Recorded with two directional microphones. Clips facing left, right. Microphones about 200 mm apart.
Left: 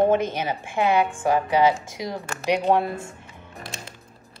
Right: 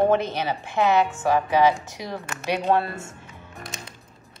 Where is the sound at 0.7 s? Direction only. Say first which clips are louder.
Right 1 dB; 10° left (ahead or behind).